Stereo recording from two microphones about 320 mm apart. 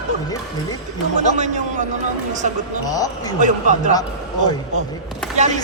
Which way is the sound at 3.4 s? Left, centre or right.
Right.